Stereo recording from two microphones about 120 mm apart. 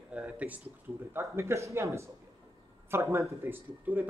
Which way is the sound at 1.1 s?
20° right (ahead or behind).